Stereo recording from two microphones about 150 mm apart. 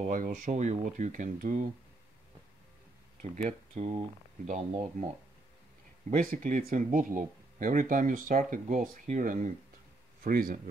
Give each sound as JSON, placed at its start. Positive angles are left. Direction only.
{"t": 0.0, "sound": "speech", "side_deg": -55}
{"t": 3.2, "sound": "speech", "side_deg": -50}
{"t": 5.0, "sound": "a man's voice", "side_deg": -70}
{"t": 6.0, "sound": "a man's voice", "side_deg": -60}